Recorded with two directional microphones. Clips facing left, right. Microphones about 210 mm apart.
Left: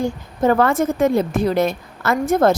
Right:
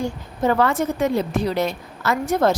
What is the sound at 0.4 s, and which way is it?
A woman's voice, 50° left (ahead or behind).